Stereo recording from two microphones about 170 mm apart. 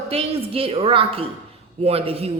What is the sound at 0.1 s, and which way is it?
A man's voice, 35° right (ahead or behind).